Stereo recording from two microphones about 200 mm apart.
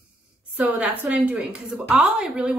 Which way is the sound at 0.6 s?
5° right (ahead or behind).